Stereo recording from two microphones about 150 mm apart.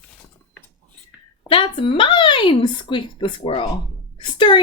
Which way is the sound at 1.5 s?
35° left (ahead or behind).